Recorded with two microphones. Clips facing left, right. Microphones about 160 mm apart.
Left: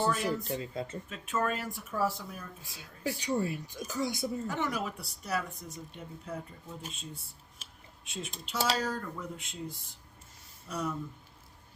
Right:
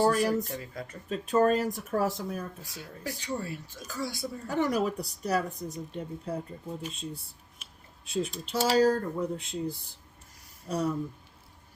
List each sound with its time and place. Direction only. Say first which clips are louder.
0.4 s speech: left 3 dB; 20° left (ahead or behind)
1.1 s speech: right 9 dB; 35° right (ahead or behind)
2.6 s speech: left 2 dB; 20° left (ahead or behind)
4.4 s speech: right 6 dB; 40° right (ahead or behind)